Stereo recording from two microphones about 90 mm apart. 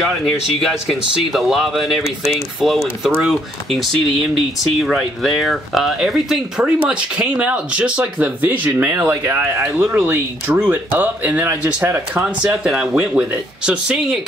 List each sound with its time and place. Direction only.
0.6 s speech: centre (ahead or behind)